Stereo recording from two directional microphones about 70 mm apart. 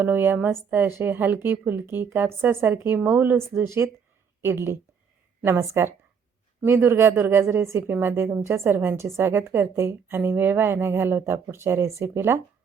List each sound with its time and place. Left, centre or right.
0.0 s a woman's voice: right